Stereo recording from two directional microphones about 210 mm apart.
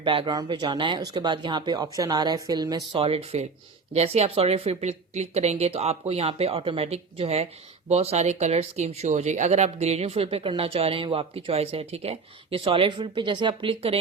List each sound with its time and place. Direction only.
0.0 s speech: 25° right (ahead or behind)